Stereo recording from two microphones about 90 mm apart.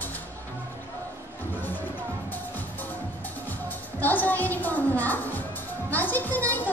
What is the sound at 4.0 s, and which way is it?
Speech, 20° left (ahead or behind).